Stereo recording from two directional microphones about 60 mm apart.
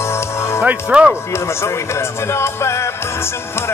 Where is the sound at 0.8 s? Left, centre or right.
Centre.